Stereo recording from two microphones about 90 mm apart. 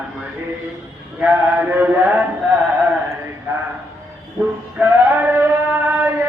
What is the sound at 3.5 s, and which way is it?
Speech, 30° right (ahead or behind).